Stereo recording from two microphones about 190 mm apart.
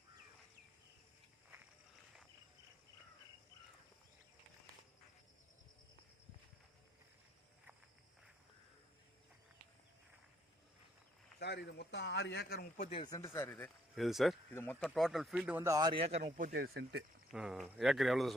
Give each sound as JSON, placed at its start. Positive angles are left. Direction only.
{"t": 11.3, "sound": "speech", "side_deg": 60}
{"t": 12.7, "sound": "speech", "side_deg": 40}
{"t": 13.0, "sound": "speech", "side_deg": 20}
{"t": 14.5, "sound": "speech", "side_deg": 10}
{"t": 16.2, "sound": "speech", "side_deg": -55}
{"t": 17.3, "sound": "speech", "side_deg": -5}